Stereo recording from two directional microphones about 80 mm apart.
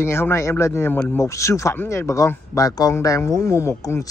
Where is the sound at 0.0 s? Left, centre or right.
Left.